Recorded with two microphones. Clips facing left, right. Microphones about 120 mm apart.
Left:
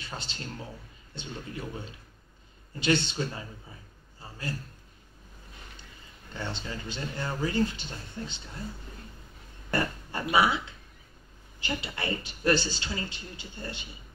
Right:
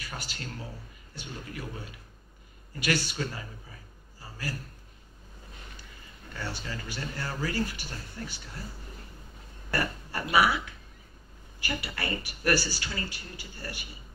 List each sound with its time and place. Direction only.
0.0 s a man's voice: 25° left (ahead or behind)
6.3 s speech: 20° left (ahead or behind)
9.7 s speech: 20° left (ahead or behind)